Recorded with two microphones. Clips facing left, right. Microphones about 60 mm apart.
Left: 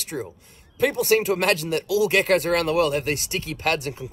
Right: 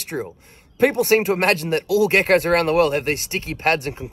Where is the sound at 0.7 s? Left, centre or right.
Right.